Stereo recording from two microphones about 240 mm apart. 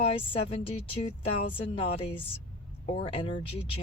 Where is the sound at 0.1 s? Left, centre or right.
Left.